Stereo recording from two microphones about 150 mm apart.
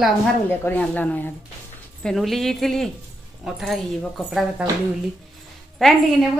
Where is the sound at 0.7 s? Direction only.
10° left (ahead or behind).